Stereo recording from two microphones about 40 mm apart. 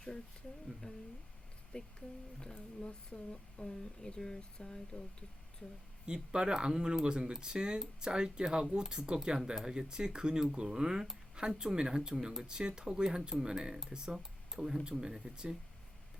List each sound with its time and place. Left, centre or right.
0.8 s speech: left
6.3 s speech: right